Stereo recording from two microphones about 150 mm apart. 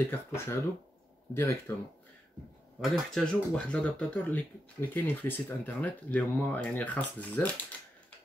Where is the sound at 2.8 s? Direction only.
Centre (ahead or behind).